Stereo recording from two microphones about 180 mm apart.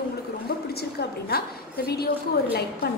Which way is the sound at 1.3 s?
60° left (ahead or behind).